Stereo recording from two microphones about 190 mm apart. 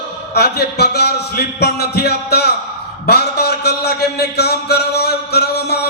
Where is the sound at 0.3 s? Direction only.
55° left (ahead or behind).